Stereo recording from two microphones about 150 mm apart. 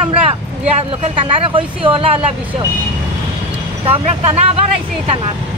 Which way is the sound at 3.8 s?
45° right (ahead or behind).